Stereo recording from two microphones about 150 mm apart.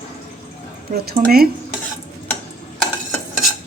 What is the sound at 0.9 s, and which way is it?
Speech, 85° right.